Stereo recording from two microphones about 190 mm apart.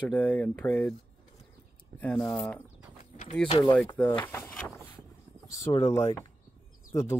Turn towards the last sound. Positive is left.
turn(degrees=15)  # may be behind; listen again after turning